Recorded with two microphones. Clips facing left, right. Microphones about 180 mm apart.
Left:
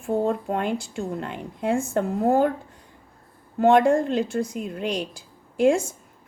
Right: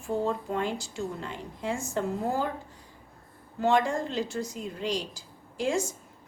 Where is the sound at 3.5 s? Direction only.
55° left (ahead or behind).